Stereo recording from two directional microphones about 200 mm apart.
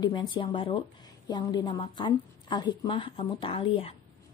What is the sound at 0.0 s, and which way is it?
A woman's voice, 20° left (ahead or behind).